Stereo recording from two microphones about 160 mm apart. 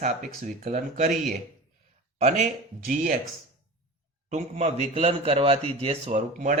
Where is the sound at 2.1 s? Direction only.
45° right (ahead or behind).